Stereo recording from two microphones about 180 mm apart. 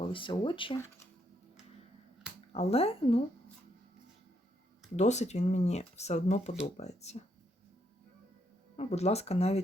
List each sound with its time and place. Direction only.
0.1 s speech: 30° left (ahead or behind)
2.5 s speech: 35° left (ahead or behind)
4.9 s speech: 40° left (ahead or behind)
8.7 s speech: 35° left (ahead or behind)